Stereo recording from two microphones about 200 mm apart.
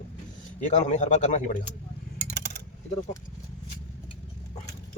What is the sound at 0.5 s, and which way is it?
Speech, 35° left (ahead or behind).